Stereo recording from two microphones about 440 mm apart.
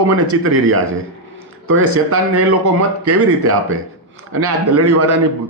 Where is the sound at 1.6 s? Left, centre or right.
Right.